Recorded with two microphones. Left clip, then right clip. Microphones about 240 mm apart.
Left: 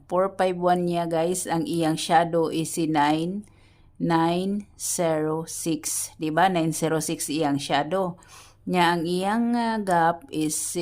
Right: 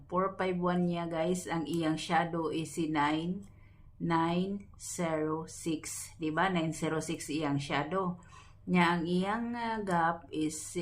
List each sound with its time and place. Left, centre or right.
0.1 s speech: left